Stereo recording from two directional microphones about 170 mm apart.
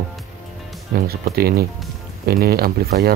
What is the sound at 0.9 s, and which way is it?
Speech, 65° right (ahead or behind).